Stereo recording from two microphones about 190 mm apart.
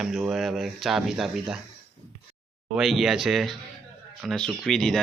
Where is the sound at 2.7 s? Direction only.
Centre (ahead or behind).